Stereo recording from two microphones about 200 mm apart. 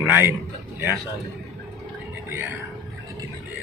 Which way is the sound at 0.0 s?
10° right (ahead or behind).